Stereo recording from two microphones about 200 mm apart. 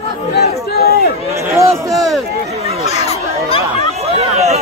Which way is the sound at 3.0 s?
30° left (ahead or behind).